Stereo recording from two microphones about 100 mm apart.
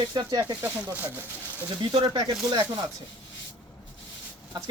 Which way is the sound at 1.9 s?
50° right (ahead or behind).